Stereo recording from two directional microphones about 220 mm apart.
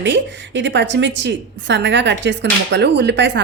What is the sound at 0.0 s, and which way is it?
A woman's voice, 55° right (ahead or behind).